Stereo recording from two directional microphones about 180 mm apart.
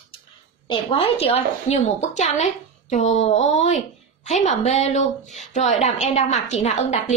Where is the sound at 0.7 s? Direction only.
30° left (ahead or behind).